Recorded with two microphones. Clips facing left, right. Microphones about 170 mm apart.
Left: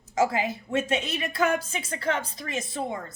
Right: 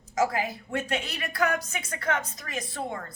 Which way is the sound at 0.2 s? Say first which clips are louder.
Left 2 dB; 25° left (ahead or behind).